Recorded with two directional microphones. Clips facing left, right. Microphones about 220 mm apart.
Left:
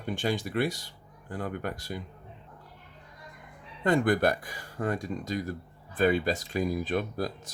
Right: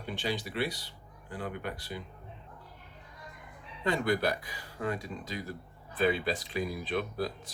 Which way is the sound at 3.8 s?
50° left (ahead or behind).